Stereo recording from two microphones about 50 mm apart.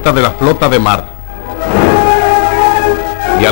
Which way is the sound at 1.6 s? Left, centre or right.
Centre.